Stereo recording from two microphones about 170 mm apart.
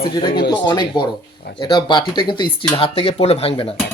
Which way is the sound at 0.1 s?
25° left (ahead or behind).